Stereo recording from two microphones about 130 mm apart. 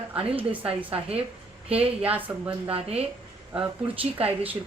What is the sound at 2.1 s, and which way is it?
Speech, 10° right (ahead or behind).